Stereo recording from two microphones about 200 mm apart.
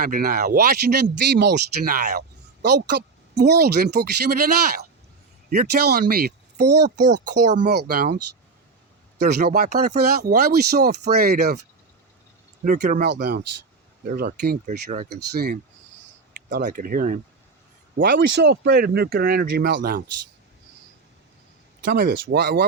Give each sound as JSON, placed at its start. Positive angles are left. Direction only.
{"t": 0.0, "sound": "speech", "side_deg": -45}
{"t": 12.6, "sound": "speech", "side_deg": -40}
{"t": 13.0, "sound": "speech", "side_deg": -60}
{"t": 14.1, "sound": "speech", "side_deg": -45}
{"t": 15.1, "sound": "speech", "side_deg": -50}
{"t": 16.6, "sound": "speech", "side_deg": -45}
{"t": 21.8, "sound": "speech", "side_deg": -45}